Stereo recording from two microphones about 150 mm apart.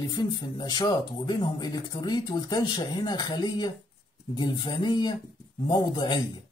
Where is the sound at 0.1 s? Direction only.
30° left (ahead or behind).